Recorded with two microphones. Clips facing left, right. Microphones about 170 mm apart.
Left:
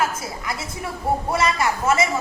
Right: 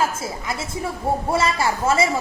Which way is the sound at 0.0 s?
25° right (ahead or behind).